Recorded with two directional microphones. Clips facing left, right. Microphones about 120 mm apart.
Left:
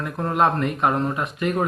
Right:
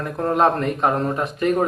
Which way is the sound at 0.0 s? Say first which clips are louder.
Right 2 dB; 35° right (ahead or behind).